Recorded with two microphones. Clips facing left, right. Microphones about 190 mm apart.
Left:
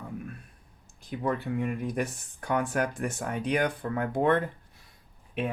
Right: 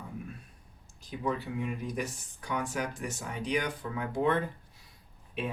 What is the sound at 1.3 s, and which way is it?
Speech, 55° left (ahead or behind).